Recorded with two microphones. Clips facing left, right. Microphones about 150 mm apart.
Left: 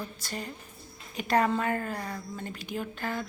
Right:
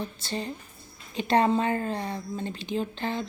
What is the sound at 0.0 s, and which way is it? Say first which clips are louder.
Speech: right 5 dB; 25° right (ahead or behind).